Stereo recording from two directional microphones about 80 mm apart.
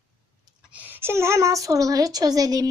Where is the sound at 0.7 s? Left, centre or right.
Right.